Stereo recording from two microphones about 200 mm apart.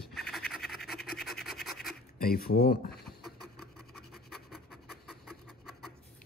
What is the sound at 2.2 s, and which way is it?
Speech, 50° left (ahead or behind).